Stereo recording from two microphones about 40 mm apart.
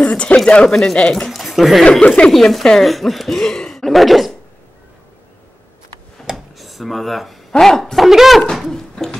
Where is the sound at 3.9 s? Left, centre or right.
Centre.